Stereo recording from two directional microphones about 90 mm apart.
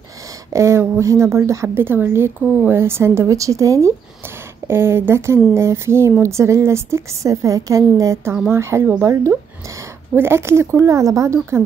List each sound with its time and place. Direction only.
0.5 s a woman's voice: 35° right (ahead or behind)